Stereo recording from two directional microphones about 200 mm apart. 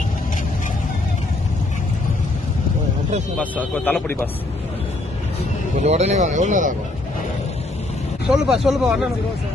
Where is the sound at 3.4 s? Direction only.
10° left (ahead or behind).